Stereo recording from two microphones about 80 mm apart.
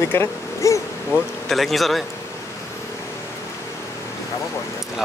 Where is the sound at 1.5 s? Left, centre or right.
Centre.